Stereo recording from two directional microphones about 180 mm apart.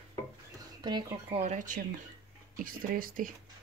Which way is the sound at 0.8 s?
25° right (ahead or behind).